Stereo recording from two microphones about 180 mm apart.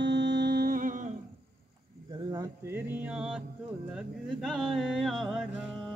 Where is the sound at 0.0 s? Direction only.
75° right (ahead or behind); by 1.1 s 45° right (ahead or behind).